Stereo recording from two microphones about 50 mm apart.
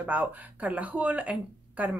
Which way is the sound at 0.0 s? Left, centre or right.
Right.